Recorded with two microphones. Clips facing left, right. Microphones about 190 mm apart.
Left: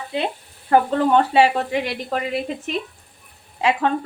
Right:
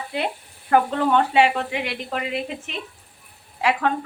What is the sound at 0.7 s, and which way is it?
Speech, 35° left (ahead or behind).